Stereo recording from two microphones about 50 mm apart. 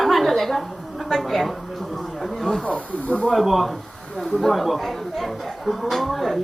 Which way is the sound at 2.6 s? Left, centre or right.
Left.